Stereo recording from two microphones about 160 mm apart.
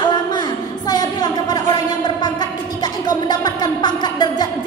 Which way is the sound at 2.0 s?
25° left (ahead or behind).